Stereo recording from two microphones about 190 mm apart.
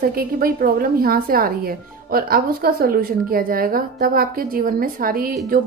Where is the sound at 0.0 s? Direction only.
50° right (ahead or behind).